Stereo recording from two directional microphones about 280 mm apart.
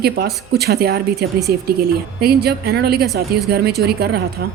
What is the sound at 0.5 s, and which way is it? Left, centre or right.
A woman's voice, right.